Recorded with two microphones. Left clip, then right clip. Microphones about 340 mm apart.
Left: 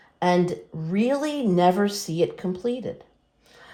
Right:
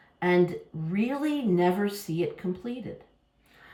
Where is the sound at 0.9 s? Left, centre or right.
Centre.